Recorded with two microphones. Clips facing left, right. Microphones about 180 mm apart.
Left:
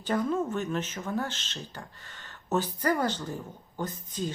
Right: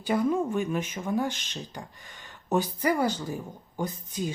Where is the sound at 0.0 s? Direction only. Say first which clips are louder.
Right 3 dB; 10° right (ahead or behind).